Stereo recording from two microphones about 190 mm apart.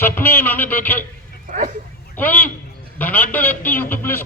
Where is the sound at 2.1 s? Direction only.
10° left (ahead or behind).